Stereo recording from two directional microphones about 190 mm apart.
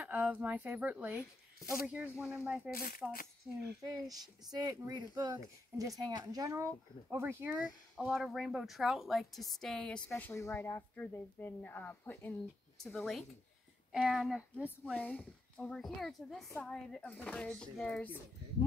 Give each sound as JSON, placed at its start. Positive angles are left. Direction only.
{"t": 0.0, "sound": "speech", "side_deg": -5}
{"t": 2.7, "sound": "speech", "side_deg": 50}
{"t": 3.4, "sound": "speech", "side_deg": -10}
{"t": 15.0, "sound": "speech", "side_deg": 10}